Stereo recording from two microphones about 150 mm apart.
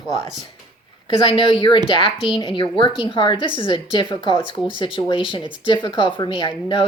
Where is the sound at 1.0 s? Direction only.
35° left (ahead or behind).